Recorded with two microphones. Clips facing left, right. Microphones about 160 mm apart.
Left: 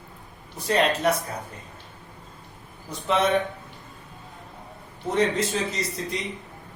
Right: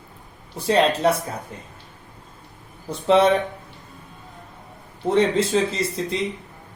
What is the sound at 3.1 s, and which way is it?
Speech, 30° right (ahead or behind).